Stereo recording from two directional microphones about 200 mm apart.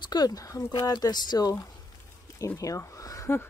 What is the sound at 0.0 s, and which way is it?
Speech, 20° left (ahead or behind).